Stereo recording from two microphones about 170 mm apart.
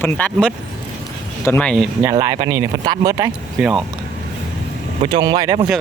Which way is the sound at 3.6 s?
5° right (ahead or behind).